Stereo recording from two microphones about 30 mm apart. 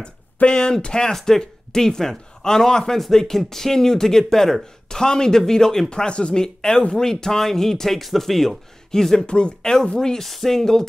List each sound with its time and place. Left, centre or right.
0.5 s speech: left
1.1 s speech: centre
4.8 s speech: left
5.9 s speech: left
6.4 s speech: left
8.9 s speech: centre
9.2 s speech: left
9.6 s speech: centre